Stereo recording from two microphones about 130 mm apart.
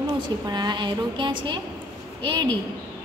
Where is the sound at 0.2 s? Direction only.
35° right (ahead or behind).